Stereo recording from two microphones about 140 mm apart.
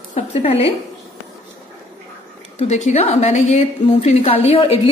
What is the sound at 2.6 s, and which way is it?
A woman's voice, 50° left (ahead or behind).